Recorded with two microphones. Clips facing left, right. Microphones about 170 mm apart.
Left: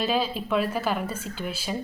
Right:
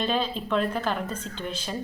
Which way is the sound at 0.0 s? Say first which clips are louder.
Left 1 dB; 5° left (ahead or behind).